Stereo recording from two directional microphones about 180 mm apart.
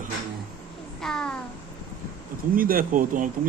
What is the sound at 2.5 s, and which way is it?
Speech, 50° right (ahead or behind).